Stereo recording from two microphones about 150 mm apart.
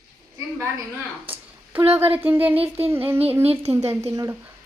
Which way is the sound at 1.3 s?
15° right (ahead or behind).